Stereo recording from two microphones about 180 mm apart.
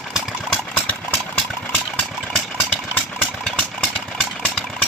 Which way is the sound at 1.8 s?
Centre (ahead or behind).